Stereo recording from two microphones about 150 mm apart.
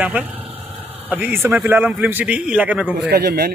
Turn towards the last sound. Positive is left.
turn(degrees=-90)